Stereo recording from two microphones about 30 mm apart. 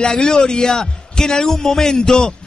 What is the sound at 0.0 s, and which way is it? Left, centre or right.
A man's voice, left.